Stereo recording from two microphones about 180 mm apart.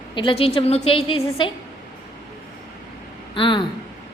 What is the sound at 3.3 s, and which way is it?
Speech, 25° left (ahead or behind).